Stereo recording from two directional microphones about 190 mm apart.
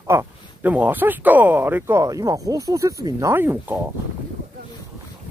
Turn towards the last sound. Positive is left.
turn(degrees=-10)  # may be behind; listen again after turning